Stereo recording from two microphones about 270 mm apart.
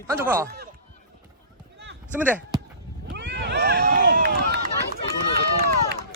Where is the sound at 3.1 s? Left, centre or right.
Right.